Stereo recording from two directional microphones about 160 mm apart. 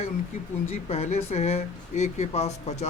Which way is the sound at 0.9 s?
40° left (ahead or behind).